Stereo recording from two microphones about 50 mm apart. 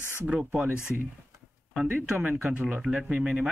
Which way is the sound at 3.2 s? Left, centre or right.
Centre.